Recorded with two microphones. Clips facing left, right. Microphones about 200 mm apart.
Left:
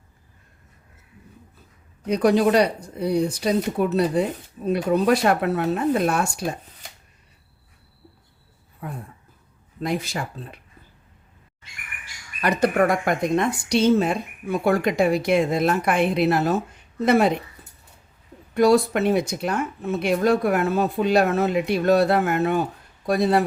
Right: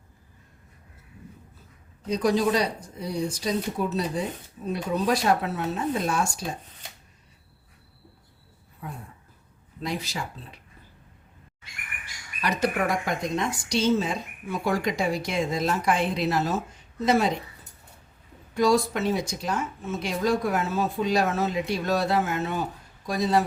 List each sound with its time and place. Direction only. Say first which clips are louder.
2.0 s speech: left 5 dB; 65° left (ahead or behind)
9.8 s speech: left 5 dB; 55° left (ahead or behind)
12.4 s speech: left 6 dB; 55° left (ahead or behind)
18.5 s speech: left 5 dB; 60° left (ahead or behind)